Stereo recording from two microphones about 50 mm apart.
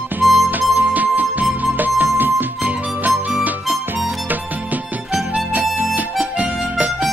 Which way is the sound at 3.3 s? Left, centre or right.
Right.